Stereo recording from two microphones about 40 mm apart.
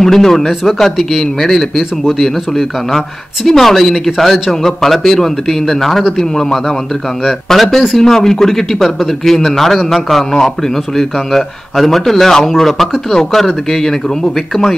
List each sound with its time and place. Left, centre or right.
0.0 s speech: centre
7.5 s speech: centre
8.0 s speech: centre